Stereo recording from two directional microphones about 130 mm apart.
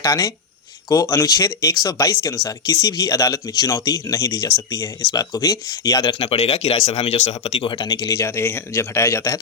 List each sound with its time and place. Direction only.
0.0 s speech: 25° left (ahead or behind)
6.1 s speech: 50° left (ahead or behind)
7.9 s speech: 25° left (ahead or behind)